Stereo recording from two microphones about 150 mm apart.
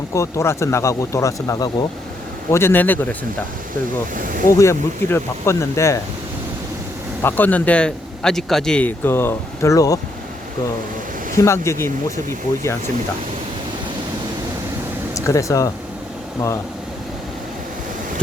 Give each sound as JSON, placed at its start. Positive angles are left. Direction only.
{"t": 0.1, "sound": "speech", "side_deg": 20}
{"t": 4.4, "sound": "speech", "side_deg": 20}
{"t": 7.2, "sound": "speech", "side_deg": 15}
{"t": 11.3, "sound": "speech", "side_deg": 20}
{"t": 15.1, "sound": "speech", "side_deg": 20}